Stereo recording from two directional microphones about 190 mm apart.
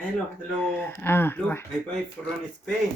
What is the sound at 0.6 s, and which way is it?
Speech, 10° left (ahead or behind).